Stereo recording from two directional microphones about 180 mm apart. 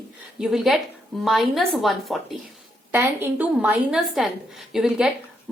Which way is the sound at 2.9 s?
10° right (ahead or behind).